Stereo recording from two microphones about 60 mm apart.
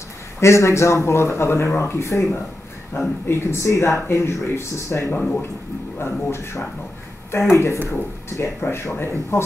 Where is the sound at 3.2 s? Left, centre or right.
Left.